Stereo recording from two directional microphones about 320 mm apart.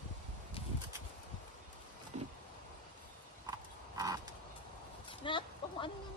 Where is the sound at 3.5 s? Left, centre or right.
Centre.